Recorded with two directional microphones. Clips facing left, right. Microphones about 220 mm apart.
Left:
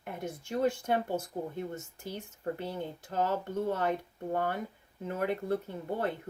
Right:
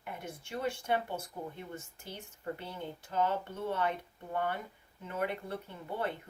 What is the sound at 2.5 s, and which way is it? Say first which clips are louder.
Speech: left 5 dB; 40° left (ahead or behind).